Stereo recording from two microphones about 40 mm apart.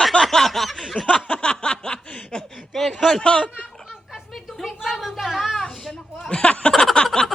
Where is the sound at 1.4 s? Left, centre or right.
Left.